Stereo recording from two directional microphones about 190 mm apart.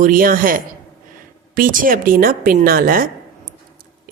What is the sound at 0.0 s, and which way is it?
Speech, 45° right (ahead or behind).